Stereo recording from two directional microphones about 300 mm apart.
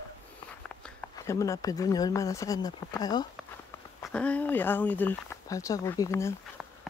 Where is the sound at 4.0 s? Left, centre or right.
Centre.